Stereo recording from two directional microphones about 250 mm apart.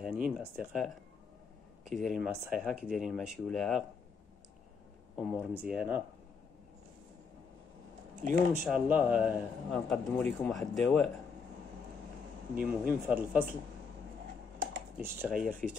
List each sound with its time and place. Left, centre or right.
0.0 s a man's voice: centre
5.1 s a man's voice: centre
8.2 s speech: right
8.6 s a man's voice: centre
12.6 s speech: centre
15.1 s a man's voice: centre